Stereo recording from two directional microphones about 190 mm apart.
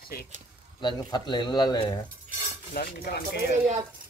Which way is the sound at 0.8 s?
25° left (ahead or behind).